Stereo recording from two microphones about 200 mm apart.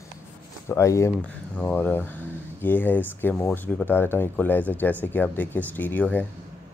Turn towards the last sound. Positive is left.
turn(degrees=10)  # may be behind; listen again after turning